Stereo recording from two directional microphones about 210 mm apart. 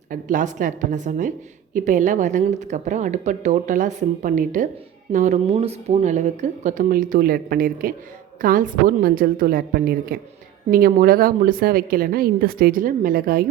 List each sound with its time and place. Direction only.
0.1 s a woman's voice: 35° right (ahead or behind)